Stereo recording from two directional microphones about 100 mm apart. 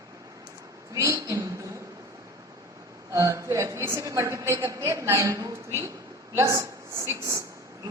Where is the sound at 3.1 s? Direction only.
30° right (ahead or behind).